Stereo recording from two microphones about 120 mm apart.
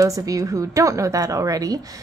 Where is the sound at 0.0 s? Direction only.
30° right (ahead or behind).